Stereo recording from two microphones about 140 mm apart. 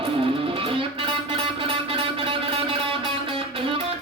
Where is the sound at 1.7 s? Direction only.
40° right (ahead or behind).